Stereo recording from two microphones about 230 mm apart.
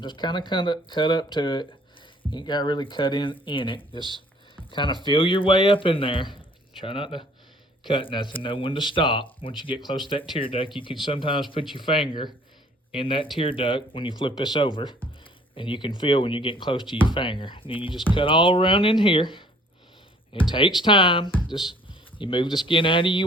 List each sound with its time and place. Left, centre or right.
0.0 s speech: centre
4.5 s music: left
5.0 s speech: left
20.5 s speech: centre